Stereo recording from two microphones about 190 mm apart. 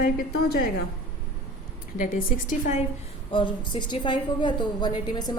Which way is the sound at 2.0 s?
45° left (ahead or behind).